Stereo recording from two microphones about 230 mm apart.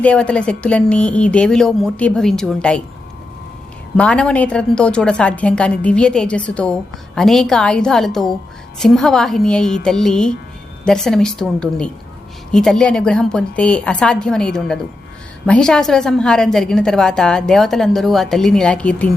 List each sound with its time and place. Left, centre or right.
0.0 s a woman's voice: centre
3.9 s a woman's voice: centre